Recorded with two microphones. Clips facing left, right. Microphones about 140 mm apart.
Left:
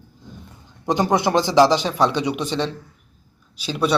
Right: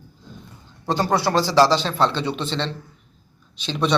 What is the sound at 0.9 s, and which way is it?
A man's voice, 15° left (ahead or behind).